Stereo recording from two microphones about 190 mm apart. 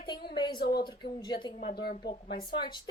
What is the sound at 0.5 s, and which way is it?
Speech, 55° left (ahead or behind).